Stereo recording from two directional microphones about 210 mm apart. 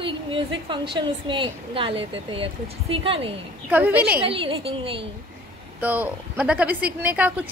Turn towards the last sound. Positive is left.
turn(degrees=-5)  # may be behind; listen again after turning